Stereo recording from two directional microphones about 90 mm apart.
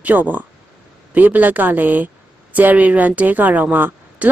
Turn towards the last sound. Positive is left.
turn(degrees=-15)  # may be behind; listen again after turning